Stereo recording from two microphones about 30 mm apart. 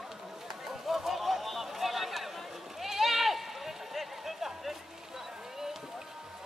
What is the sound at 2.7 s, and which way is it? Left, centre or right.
Sheep, centre.